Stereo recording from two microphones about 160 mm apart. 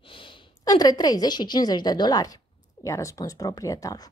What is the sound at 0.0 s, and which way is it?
A woman's voice, 30° left (ahead or behind).